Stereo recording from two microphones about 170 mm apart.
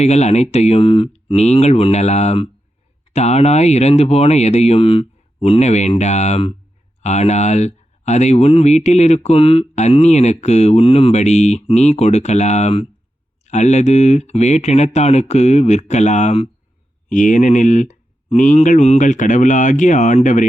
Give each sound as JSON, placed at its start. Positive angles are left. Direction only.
{"t": 0.0, "sound": "speech", "side_deg": 40}